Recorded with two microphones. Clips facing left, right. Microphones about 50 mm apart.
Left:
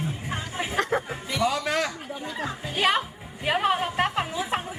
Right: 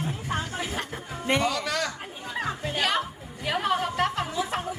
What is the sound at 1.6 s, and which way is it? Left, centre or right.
Chatter, centre.